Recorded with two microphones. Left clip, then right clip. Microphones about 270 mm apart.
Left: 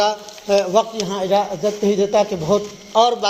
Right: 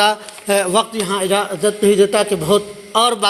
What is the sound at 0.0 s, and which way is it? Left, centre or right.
A man's voice, right.